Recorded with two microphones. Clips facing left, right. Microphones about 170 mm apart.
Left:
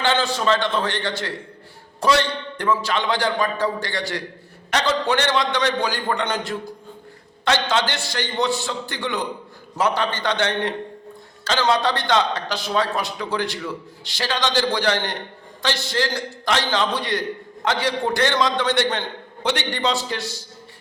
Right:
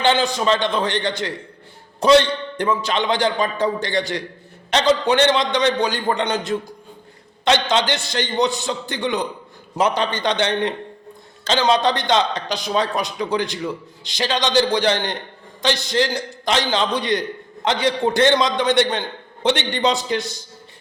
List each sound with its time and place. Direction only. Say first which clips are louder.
0.0 s a man's voice: right 3 dB; 15° right (ahead or behind)